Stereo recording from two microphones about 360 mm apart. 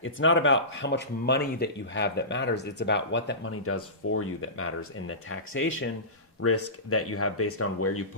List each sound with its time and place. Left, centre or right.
0.0 s speech: left